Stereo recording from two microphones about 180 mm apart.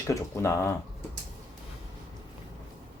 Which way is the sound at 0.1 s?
15° left (ahead or behind).